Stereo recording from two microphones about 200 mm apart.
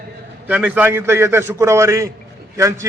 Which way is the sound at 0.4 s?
10° right (ahead or behind).